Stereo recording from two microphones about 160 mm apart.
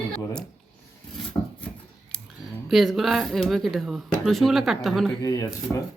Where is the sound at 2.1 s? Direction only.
5° left (ahead or behind).